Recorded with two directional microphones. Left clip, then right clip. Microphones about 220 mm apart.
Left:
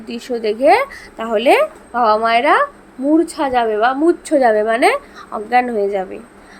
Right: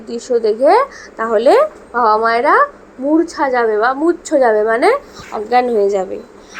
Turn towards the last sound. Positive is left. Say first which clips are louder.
# right 4 dB
turn(degrees=20)  # may be behind; listen again after turning